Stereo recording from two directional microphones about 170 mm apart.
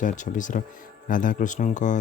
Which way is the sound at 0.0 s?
50° left (ahead or behind).